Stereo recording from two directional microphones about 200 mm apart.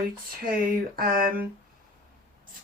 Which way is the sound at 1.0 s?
45° right (ahead or behind).